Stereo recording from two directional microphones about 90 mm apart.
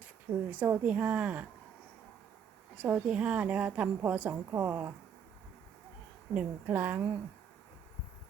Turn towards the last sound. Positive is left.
turn(degrees=-20)  # may be behind; listen again after turning